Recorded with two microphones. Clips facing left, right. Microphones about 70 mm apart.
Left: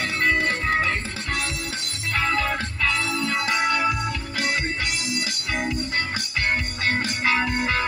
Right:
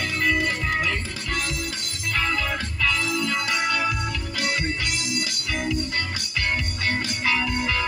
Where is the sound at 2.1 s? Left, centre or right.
Left.